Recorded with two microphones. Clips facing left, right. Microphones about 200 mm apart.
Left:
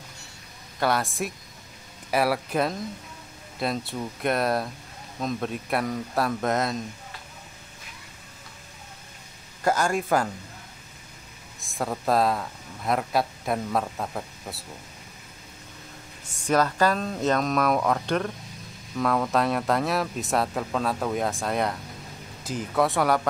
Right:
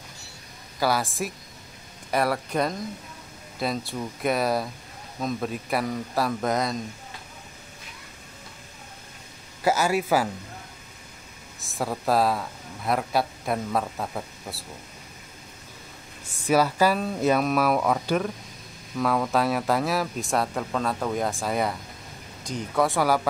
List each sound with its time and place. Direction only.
0.7 s speech: centre (ahead or behind)
9.6 s speech: 5° right (ahead or behind)
11.6 s speech: centre (ahead or behind)
16.4 s speech: 10° right (ahead or behind)